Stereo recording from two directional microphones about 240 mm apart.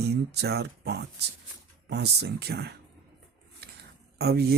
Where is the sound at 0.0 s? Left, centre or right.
Right.